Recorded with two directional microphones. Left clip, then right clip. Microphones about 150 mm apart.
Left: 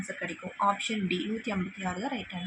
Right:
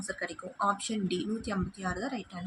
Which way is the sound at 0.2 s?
20° left (ahead or behind).